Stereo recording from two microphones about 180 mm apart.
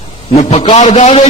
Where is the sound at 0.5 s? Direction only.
35° left (ahead or behind).